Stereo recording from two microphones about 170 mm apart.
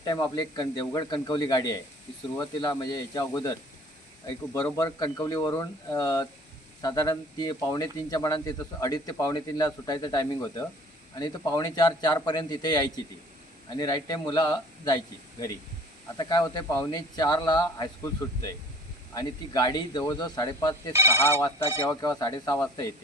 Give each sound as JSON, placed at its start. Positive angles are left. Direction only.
{"t": 0.0, "sound": "speech", "side_deg": 25}
{"t": 4.8, "sound": "speech", "side_deg": 20}
{"t": 20.9, "sound": "speech", "side_deg": -15}
{"t": 21.2, "sound": "speech", "side_deg": 15}